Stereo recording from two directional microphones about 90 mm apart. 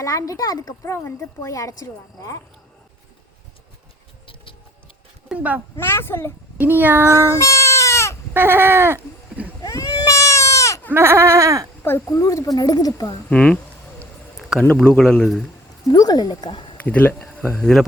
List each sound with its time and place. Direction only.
0.0 s a woman's voice: 40° left (ahead or behind)
5.3 s a child's voice: 15° right (ahead or behind)
5.7 s speech: 25° left (ahead or behind)
6.6 s speech: 20° right (ahead or behind)
7.3 s goat: 35° left (ahead or behind)
8.3 s speech: 25° right (ahead or behind)
9.6 s baby cry: 35° left (ahead or behind)
10.9 s goat: 25° right (ahead or behind)
11.8 s speech: 25° left (ahead or behind); by 13.1 s 45° left (ahead or behind)
13.3 s speech: 15° left (ahead or behind)
14.6 s speech: 10° left (ahead or behind)
15.9 s speech: 50° left (ahead or behind)
16.7 s speech: 15° left (ahead or behind)
17.5 s speech: 5° left (ahead or behind)